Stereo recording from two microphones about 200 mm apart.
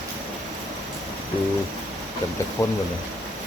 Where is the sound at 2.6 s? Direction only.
20° left (ahead or behind).